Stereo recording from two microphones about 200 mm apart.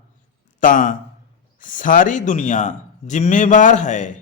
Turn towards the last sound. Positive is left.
turn(degrees=35)  # may be behind; listen again after turning